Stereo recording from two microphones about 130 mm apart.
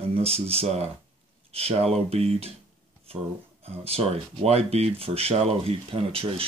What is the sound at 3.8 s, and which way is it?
Speech, 50° right (ahead or behind).